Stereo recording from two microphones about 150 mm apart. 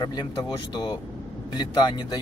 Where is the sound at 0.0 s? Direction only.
25° left (ahead or behind).